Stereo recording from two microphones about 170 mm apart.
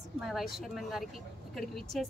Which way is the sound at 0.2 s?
Centre (ahead or behind).